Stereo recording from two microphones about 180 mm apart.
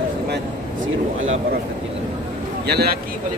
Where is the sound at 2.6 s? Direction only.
60° right (ahead or behind).